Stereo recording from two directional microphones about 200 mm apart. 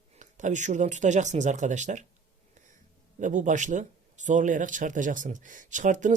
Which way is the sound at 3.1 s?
40° right (ahead or behind).